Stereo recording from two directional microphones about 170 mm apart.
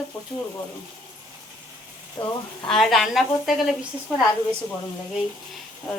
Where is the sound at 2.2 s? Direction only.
25° left (ahead or behind).